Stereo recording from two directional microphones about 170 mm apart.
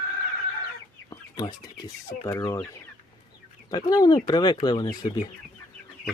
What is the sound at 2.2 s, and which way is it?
Speech, 20° left (ahead or behind).